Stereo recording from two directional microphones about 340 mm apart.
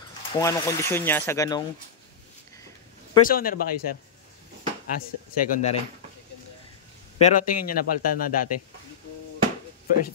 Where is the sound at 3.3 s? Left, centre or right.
Left.